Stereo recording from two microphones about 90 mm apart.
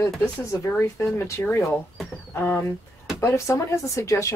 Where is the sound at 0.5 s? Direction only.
30° left (ahead or behind).